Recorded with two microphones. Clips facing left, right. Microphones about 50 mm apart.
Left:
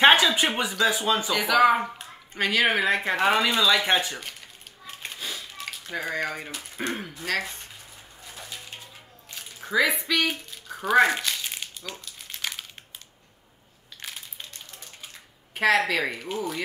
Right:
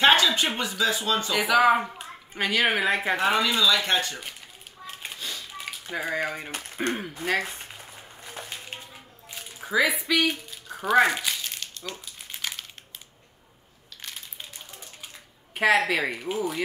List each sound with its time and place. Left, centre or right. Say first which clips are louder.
0.0 s speech: left 2 dB; centre
1.3 s speech: even; centre
4.8 s a sound: even; centre
5.6 s speech: right 1 dB; centre
7.2 s speech: right 2 dB; centre
8.4 s a sound: right 3 dB; right
9.3 s speech: even; centre
11.9 s crumpling: right 1 dB; centre
12.4 s crumpling: left 1 dB; centre
15.5 s a woman's voice: even; centre